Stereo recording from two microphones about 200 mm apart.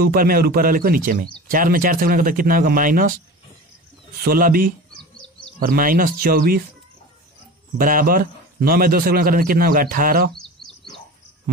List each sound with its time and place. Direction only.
0.0 s a man's voice: 50° right (ahead or behind)
4.2 s a man's voice: 45° right (ahead or behind)
4.9 s bird: 5° left (ahead or behind)
5.6 s a man's voice: 45° right (ahead or behind)
7.7 s a man's voice: 45° right (ahead or behind)
10.3 s bird: centre (ahead or behind)